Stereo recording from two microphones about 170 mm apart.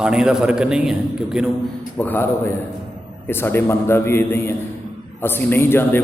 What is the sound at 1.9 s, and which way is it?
A man's voice, 10° left (ahead or behind).